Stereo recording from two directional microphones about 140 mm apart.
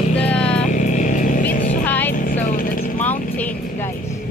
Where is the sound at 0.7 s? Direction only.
65° left (ahead or behind).